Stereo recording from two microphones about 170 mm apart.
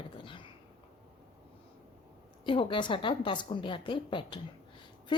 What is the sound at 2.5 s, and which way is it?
A woman's voice, 30° left (ahead or behind).